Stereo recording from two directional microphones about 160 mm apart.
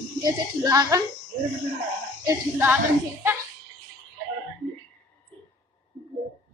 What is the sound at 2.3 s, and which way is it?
Speech, 15° right (ahead or behind).